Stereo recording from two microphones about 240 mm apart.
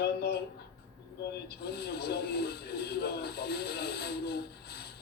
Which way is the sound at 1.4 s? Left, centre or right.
Left.